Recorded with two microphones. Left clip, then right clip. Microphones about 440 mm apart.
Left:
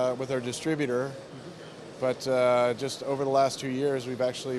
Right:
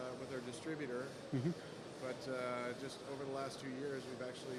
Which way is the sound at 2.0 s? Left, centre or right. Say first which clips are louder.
Left 19 dB; left.